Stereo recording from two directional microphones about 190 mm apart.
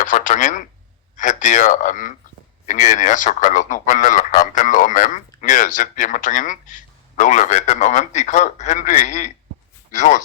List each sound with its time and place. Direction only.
0.0 s speech: 40° left (ahead or behind)